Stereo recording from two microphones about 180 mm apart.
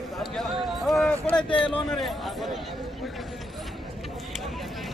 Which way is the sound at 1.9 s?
Centre (ahead or behind).